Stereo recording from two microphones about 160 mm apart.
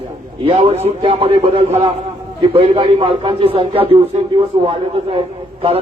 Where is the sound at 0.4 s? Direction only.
40° right (ahead or behind).